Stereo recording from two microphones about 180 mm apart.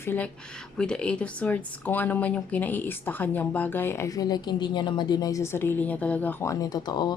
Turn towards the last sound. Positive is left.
turn(degrees=25)  # may be behind; listen again after turning